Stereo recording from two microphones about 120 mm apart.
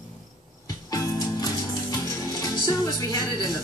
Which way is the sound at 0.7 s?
30° left (ahead or behind).